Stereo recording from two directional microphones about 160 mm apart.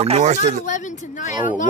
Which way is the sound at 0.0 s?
45° right (ahead or behind).